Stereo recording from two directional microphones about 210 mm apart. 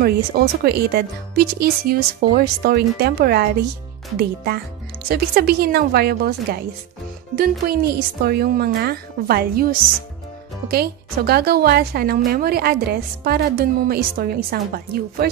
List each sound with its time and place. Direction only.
0.0 s speech: 50° right (ahead or behind)
5.0 s speech: 45° right (ahead or behind)
10.7 s speech: 45° right (ahead or behind)